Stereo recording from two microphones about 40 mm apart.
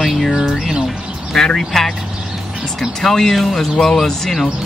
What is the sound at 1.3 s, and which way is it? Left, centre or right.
Speech, centre.